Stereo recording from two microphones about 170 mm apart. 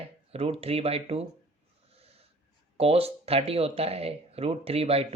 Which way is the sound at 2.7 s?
35° right (ahead or behind).